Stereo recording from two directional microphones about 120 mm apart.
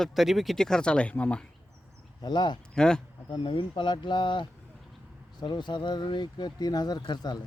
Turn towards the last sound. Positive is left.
turn(degrees=35)  # may be behind; listen again after turning